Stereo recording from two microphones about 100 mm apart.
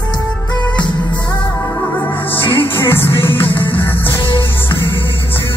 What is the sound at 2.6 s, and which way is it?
Music, 20° left (ahead or behind).